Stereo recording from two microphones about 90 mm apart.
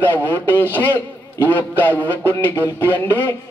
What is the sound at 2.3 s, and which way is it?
A man's voice, 25° left (ahead or behind).